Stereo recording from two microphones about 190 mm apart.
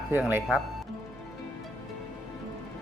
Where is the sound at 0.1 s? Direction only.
10° right (ahead or behind).